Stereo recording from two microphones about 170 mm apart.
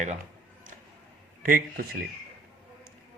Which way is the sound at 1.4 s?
55° right (ahead or behind).